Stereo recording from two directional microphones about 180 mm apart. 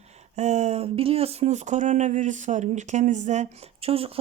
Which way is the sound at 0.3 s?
40° right (ahead or behind).